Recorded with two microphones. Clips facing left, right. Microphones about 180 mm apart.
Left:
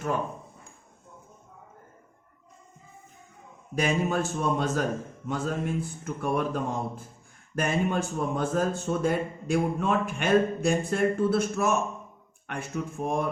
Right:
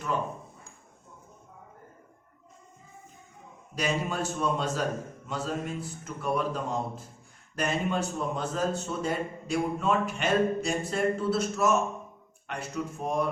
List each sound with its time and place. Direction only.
3.8 s a man's voice: 50° left (ahead or behind)